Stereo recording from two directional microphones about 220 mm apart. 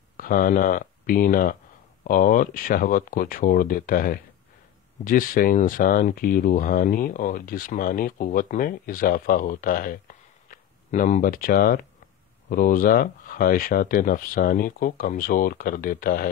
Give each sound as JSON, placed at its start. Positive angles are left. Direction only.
{"t": 0.2, "sound": "speech", "side_deg": 40}